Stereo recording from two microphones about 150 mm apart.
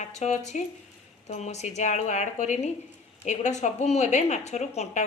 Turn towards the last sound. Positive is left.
turn(degrees=50)  # may be behind; listen again after turning